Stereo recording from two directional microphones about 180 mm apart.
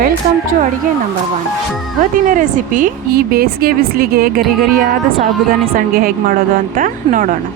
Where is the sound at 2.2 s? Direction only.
45° right (ahead or behind).